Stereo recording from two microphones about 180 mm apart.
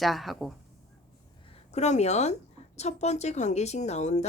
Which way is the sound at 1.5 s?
40° left (ahead or behind).